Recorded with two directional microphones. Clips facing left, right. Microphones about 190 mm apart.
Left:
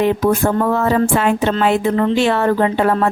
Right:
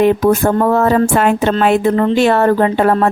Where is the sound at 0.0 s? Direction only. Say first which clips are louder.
Right 4 dB; 50° right (ahead or behind).